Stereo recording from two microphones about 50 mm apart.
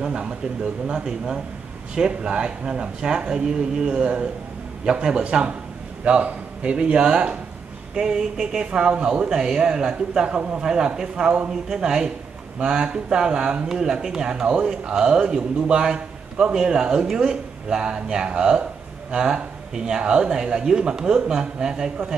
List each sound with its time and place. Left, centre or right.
0.0 s speech: right
11.8 s speech: centre